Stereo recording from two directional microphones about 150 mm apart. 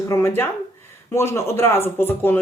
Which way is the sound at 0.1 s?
15° left (ahead or behind).